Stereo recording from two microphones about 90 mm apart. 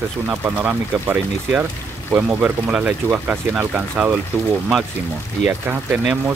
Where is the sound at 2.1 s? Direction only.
20° right (ahead or behind).